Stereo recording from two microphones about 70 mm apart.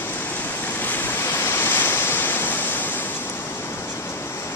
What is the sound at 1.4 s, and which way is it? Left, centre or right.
Waves, left.